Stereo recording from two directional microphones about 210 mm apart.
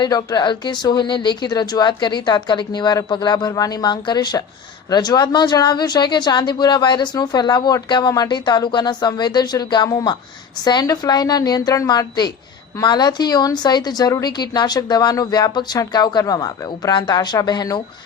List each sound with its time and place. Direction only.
0.0 s speech: 20° left (ahead or behind)